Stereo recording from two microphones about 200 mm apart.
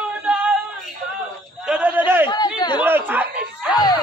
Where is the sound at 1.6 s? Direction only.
5° right (ahead or behind).